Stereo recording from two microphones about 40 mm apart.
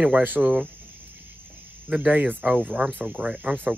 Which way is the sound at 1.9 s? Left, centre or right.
Right.